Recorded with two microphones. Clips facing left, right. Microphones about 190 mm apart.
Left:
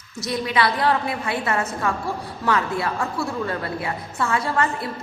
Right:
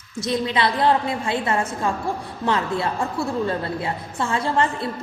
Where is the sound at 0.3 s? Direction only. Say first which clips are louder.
Right 1 dB; 25° right (ahead or behind).